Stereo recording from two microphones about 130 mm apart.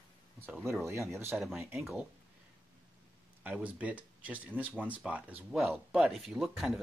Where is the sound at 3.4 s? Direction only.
10° right (ahead or behind).